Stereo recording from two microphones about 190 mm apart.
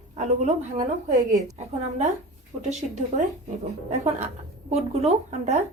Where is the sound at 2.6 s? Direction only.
40° right (ahead or behind).